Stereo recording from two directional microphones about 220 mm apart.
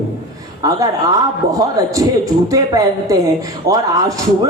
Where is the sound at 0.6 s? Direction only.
15° right (ahead or behind).